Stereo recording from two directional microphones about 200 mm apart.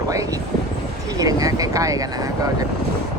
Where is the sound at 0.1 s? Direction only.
15° right (ahead or behind).